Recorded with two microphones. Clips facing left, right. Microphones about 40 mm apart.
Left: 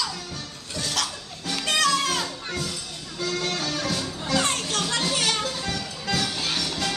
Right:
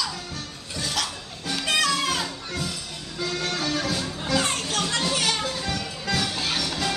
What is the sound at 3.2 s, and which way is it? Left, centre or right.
Music, centre.